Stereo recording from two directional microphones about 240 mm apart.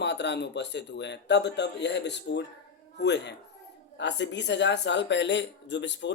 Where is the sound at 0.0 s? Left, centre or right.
Left.